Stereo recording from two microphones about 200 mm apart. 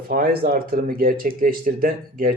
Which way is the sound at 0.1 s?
45° right (ahead or behind).